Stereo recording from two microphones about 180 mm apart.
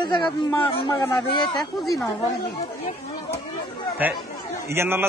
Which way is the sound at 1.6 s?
Centre (ahead or behind).